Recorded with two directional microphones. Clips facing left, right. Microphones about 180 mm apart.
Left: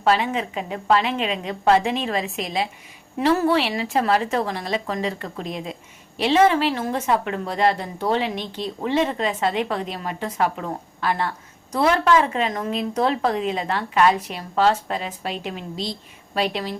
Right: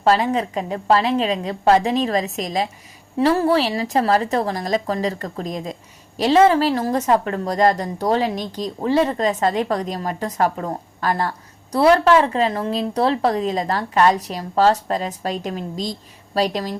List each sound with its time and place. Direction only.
0.0 s a woman's voice: 40° right (ahead or behind)